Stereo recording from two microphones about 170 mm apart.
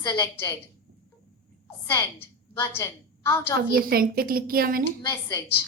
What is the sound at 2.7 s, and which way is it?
Speech, 15° left (ahead or behind).